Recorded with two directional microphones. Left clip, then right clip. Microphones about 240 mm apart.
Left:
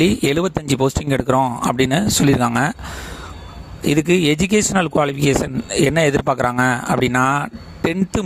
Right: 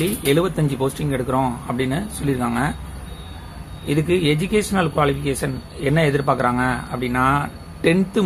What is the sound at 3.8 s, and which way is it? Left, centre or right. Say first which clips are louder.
Speech: left 3 dB; left.